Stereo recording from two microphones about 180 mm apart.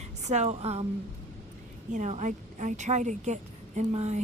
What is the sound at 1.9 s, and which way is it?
A woman's voice, 40° right (ahead or behind).